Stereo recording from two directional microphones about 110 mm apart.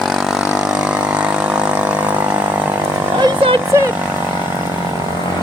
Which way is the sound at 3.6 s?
25° right (ahead or behind).